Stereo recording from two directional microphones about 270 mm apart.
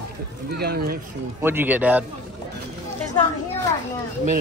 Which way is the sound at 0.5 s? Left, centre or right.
Right.